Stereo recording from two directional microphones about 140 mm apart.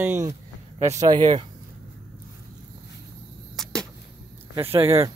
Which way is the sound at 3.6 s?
5° left (ahead or behind).